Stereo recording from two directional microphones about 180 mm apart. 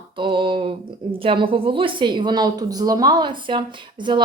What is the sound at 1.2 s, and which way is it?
Speech, 30° right (ahead or behind).